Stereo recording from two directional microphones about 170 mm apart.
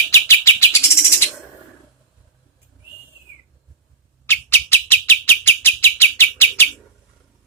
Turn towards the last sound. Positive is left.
turn(degrees=15)  # may be behind; listen again after turning